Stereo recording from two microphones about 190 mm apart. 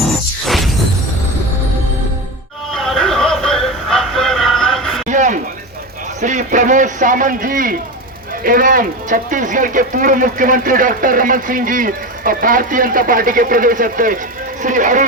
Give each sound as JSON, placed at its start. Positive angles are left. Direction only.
{"t": 0.0, "sound": "music", "side_deg": 0}
{"t": 2.7, "sound": "music", "side_deg": 0}
{"t": 5.0, "sound": "a sound", "side_deg": -40}
{"t": 6.2, "sound": "a man's voice", "side_deg": -40}